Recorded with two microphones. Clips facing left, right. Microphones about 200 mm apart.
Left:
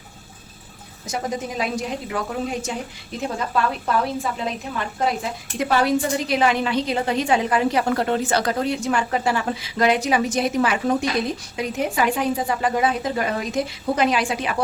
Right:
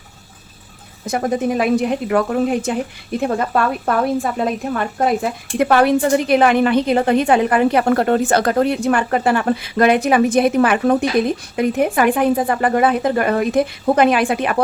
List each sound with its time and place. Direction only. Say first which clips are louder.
1.0 s a woman's voice: right 8 dB; 55° right (ahead or behind)